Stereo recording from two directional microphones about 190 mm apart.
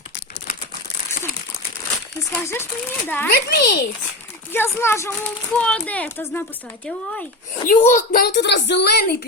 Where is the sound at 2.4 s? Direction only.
15° left (ahead or behind).